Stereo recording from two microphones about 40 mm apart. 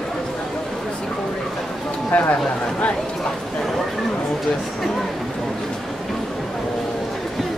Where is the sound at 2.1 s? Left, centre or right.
Left.